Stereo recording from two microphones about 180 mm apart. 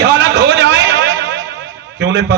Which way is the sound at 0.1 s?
75° right (ahead or behind).